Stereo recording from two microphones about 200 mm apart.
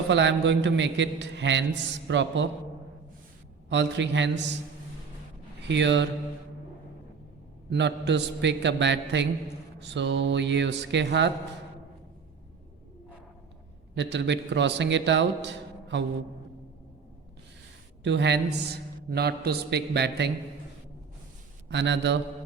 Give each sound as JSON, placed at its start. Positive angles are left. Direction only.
{"t": 0.1, "sound": "a man's voice", "side_deg": -65}
{"t": 3.7, "sound": "a man's voice", "side_deg": -65}
{"t": 5.6, "sound": "a man's voice", "side_deg": -60}
{"t": 7.7, "sound": "a man's voice", "side_deg": -60}
{"t": 13.9, "sound": "a man's voice", "side_deg": -65}
{"t": 18.0, "sound": "a man's voice", "side_deg": -60}
{"t": 21.7, "sound": "a man's voice", "side_deg": -65}